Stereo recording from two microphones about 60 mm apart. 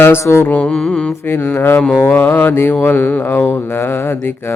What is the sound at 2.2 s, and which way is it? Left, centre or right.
Mantra, left.